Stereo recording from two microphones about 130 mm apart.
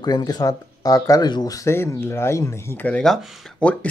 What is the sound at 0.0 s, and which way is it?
Speech, 30° left (ahead or behind).